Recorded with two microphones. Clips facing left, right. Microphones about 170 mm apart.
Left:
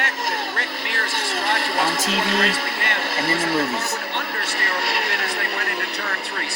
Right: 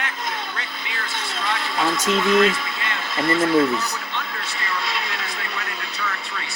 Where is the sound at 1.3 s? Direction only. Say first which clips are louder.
Left 2 dB; 55° left (ahead or behind).